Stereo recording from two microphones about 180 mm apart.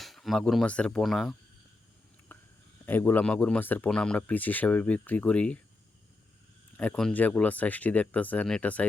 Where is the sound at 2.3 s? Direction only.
10° left (ahead or behind).